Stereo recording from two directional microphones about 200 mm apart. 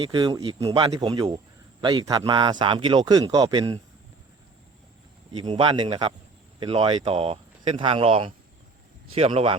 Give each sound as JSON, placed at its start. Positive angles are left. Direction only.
{"t": 0.0, "sound": "speech", "side_deg": -25}
{"t": 5.3, "sound": "speech", "side_deg": -25}